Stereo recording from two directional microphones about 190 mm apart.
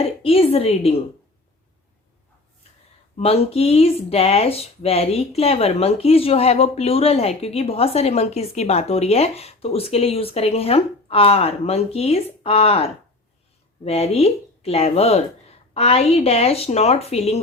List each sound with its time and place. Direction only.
0.0 s speech: 30° left (ahead or behind)
3.2 s speech: 30° left (ahead or behind)